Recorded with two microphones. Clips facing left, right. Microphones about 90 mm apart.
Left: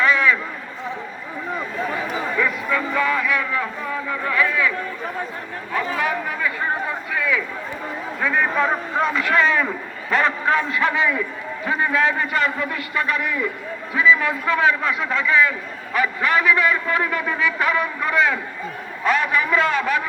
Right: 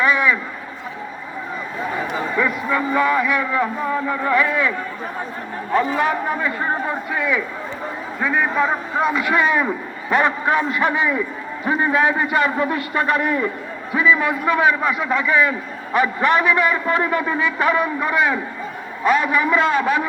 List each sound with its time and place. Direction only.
0.0 s a sound: 15° right (ahead or behind)
2.3 s a man's voice: 15° right (ahead or behind)
6.0 s speech: 30° right (ahead or behind)
8.2 s a man's voice: 10° right (ahead or behind); by 13.5 s 35° right (ahead or behind)
13.9 s a man's voice: 15° right (ahead or behind)
15.4 s a man's voice: 25° right (ahead or behind); by 19.4 s 10° right (ahead or behind)
19.4 s a man's voice: 20° right (ahead or behind)